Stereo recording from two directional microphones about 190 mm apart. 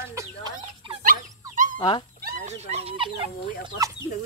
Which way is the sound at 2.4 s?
35° right (ahead or behind).